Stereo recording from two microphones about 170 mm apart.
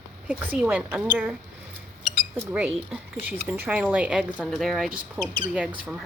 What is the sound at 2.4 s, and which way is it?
Speech, 10° right (ahead or behind).